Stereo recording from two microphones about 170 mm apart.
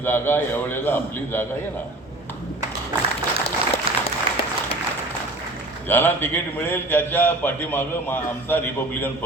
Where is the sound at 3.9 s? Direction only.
35° right (ahead or behind).